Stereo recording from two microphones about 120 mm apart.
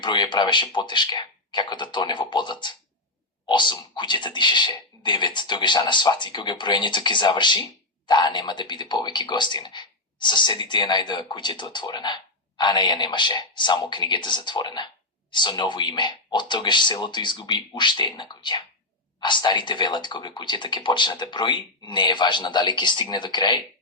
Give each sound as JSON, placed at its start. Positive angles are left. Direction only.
{"t": 0.0, "sound": "speech", "side_deg": 40}